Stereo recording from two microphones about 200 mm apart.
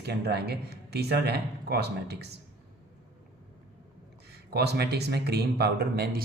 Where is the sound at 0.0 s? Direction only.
55° right (ahead or behind).